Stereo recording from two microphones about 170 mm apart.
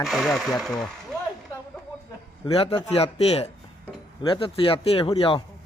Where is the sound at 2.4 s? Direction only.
35° left (ahead or behind).